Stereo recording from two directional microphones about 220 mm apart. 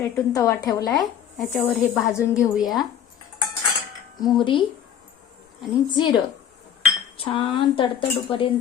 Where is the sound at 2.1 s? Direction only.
15° left (ahead or behind).